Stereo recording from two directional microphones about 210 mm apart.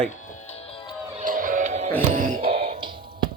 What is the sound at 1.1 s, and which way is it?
Music, 40° right (ahead or behind).